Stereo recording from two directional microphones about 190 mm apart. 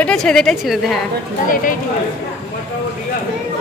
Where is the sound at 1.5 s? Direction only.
45° left (ahead or behind).